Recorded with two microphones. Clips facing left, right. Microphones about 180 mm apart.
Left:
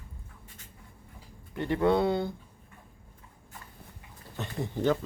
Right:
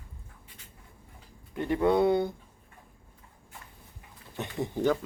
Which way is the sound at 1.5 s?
15° right (ahead or behind).